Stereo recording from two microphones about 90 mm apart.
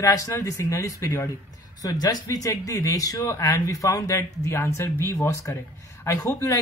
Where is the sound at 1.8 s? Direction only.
45° left (ahead or behind); by 5.6 s 30° left (ahead or behind).